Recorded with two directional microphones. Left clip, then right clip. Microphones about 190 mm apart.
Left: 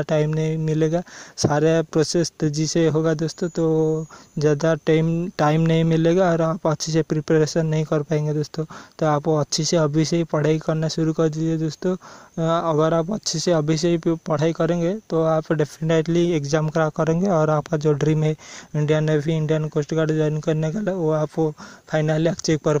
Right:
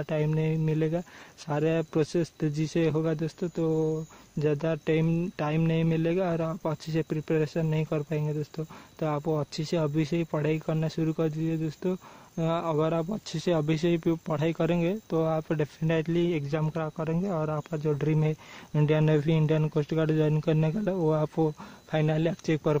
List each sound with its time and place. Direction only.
0.0 s speech: 35° left (ahead or behind)